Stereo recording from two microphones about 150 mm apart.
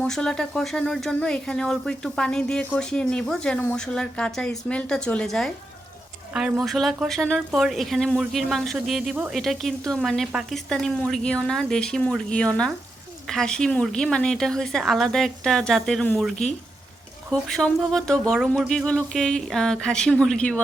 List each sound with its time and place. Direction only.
0.0 s speech: 5° left (ahead or behind)
17.5 s speech: 5° left (ahead or behind)